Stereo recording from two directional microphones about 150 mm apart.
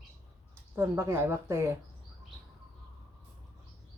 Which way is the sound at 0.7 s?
15° right (ahead or behind).